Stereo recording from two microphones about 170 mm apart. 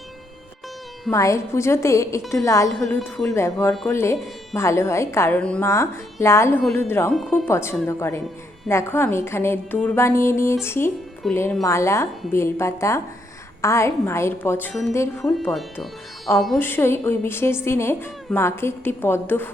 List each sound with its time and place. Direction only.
1.1 s speech: 20° left (ahead or behind)
3.0 s speech: centre (ahead or behind)
3.3 s speech: 15° left (ahead or behind)
7.1 s speech: centre (ahead or behind)
7.4 s speech: 15° left (ahead or behind)
11.2 s speech: centre (ahead or behind)
11.6 s speech: 15° left (ahead or behind)
15.4 s speech: centre (ahead or behind)
16.6 s speech: 15° left (ahead or behind)